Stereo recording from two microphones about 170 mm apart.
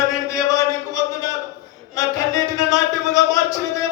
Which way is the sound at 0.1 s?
20° left (ahead or behind).